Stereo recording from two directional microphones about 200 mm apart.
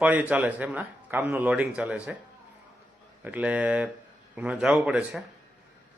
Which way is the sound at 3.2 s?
10° right (ahead or behind).